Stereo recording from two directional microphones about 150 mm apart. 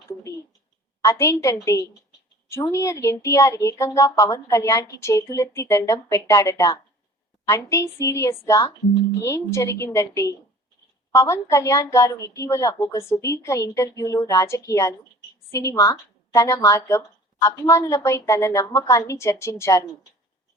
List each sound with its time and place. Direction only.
1.0 s a woman's voice: 20° left (ahead or behind)
2.6 s a woman's voice: 20° left (ahead or behind)